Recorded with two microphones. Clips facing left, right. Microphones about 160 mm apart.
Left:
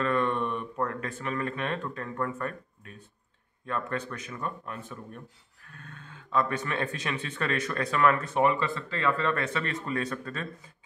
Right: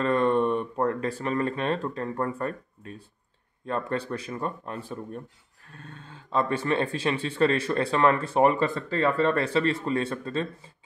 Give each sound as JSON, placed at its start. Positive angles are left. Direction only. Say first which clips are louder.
{"t": 0.0, "sound": "speech", "louder": "right 5 dB", "side_deg": -35}